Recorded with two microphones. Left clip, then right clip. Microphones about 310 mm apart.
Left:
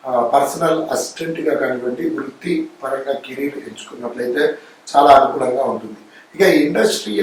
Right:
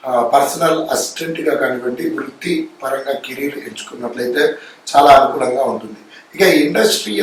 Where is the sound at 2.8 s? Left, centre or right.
Centre.